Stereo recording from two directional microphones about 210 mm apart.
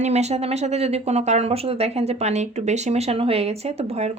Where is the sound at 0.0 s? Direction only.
30° right (ahead or behind).